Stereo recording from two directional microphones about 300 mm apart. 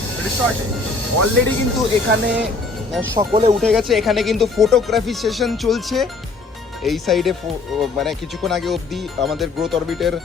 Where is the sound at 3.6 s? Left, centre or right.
Centre.